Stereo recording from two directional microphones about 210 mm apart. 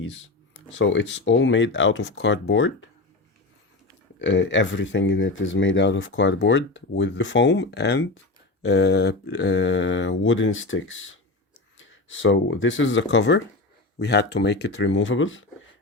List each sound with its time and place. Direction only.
0.7 s speech: 60° left (ahead or behind)
4.2 s speech: 60° left (ahead or behind)